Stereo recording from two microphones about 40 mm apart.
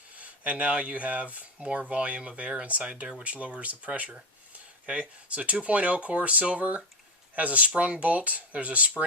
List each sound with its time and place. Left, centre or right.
0.2 s speech: right